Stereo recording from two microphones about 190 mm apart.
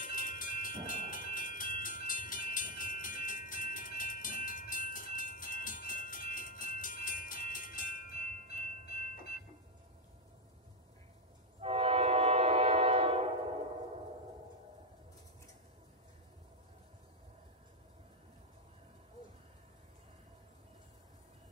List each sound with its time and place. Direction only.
0.0 s train: 45° left (ahead or behind)
0.8 s music: 45° left (ahead or behind)
11.6 s train: 30° right (ahead or behind)